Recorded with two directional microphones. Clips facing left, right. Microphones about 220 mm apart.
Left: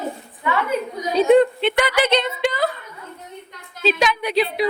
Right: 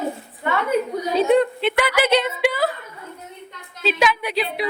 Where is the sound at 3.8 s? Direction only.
5° right (ahead or behind).